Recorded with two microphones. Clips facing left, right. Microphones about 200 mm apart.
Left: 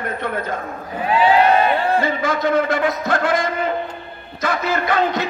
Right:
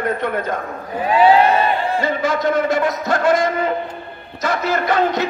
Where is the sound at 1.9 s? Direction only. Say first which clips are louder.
Even; 55° left (ahead or behind).